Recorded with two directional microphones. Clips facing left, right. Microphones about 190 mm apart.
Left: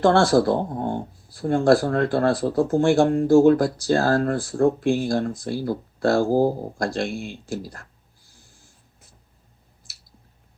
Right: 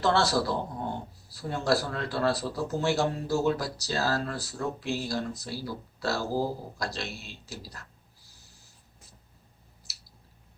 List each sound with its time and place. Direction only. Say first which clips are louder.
0.0 s speech: left 9 dB; 50° left (ahead or behind)